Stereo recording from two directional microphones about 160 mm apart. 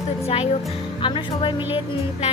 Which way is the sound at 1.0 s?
30° left (ahead or behind).